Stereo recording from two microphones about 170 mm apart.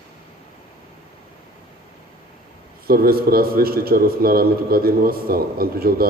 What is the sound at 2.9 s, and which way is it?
A man's voice, 60° right (ahead or behind).